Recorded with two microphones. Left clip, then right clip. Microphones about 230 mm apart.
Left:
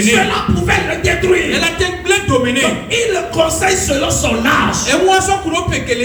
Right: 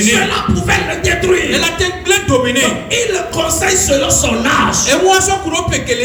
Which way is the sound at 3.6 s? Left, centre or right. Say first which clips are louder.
Right 2 dB; right.